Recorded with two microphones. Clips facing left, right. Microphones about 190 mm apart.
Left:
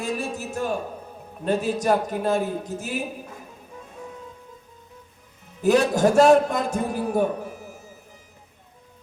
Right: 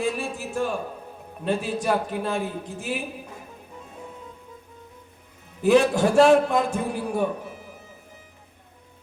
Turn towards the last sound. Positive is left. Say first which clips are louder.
# left 2 dB
turn(degrees=45)  # may be behind; listen again after turning